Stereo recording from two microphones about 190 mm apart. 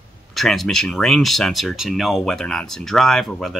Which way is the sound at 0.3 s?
Centre (ahead or behind).